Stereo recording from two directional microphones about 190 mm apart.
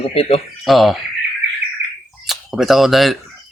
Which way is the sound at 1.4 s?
70° right (ahead or behind).